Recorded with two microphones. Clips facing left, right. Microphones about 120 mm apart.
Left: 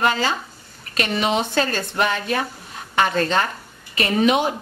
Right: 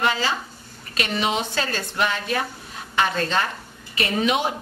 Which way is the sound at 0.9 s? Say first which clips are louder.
Left 3 dB; 50° left (ahead or behind).